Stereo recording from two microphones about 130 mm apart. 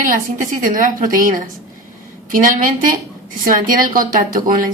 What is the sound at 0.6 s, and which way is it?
Speech, 90° right.